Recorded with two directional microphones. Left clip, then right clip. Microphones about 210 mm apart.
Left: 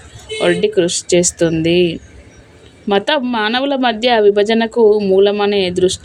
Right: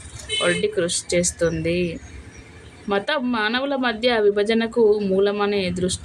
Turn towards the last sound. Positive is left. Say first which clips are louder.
# left 9 dB
turn(degrees=30)  # may be behind; listen again after turning